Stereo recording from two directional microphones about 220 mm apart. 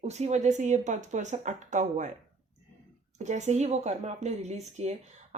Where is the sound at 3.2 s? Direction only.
30° right (ahead or behind).